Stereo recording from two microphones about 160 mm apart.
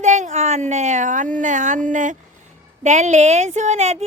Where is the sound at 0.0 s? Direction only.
50° right (ahead or behind).